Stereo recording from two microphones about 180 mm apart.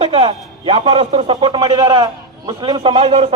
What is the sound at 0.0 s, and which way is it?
A man's voice, 30° right (ahead or behind).